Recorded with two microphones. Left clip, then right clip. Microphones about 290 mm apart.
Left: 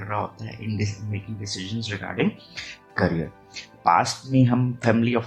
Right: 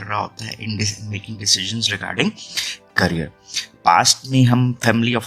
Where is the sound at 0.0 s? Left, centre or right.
Right.